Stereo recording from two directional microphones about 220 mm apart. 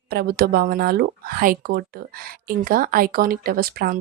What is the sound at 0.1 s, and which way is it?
Speech, 45° right (ahead or behind).